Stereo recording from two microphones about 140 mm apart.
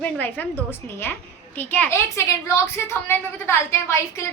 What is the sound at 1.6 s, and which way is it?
A woman's voice, 10° left (ahead or behind).